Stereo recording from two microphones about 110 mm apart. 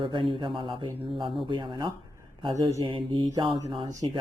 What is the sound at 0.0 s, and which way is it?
Speech, 50° right (ahead or behind).